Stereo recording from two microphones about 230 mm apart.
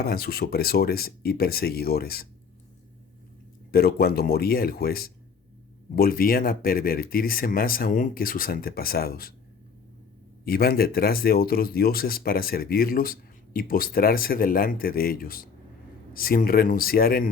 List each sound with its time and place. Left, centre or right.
0.0 s speech: left
3.7 s speech: left
10.4 s speech: left